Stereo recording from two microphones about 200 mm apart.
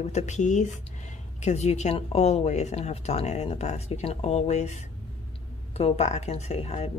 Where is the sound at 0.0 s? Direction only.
35° left (ahead or behind).